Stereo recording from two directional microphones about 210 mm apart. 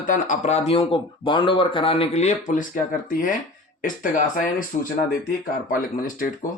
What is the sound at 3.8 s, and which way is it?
Speech, 40° left (ahead or behind).